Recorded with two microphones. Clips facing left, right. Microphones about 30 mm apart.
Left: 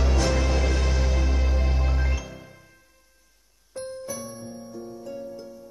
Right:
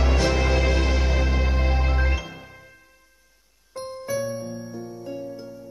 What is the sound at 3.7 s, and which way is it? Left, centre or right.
Music, right.